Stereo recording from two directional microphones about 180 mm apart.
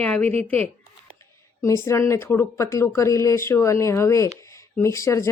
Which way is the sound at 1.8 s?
15° left (ahead or behind).